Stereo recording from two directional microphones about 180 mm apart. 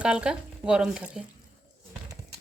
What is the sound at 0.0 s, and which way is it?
A woman's voice, 5° right (ahead or behind).